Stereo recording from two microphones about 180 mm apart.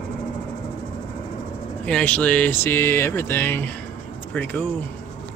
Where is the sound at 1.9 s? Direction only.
5° left (ahead or behind).